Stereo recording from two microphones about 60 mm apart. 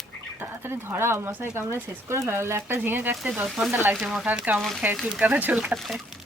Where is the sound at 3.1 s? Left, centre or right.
Centre.